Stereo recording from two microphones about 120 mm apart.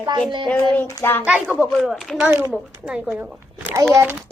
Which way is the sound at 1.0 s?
20° left (ahead or behind).